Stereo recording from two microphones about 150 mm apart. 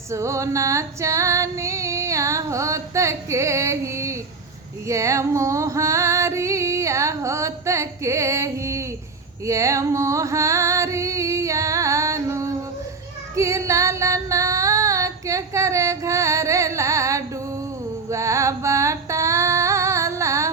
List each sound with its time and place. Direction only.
0.1 s female singing: 20° right (ahead or behind)
9.5 s music: 20° right (ahead or behind)
13.3 s female singing: 20° right (ahead or behind)
18.1 s a sound: 20° right (ahead or behind)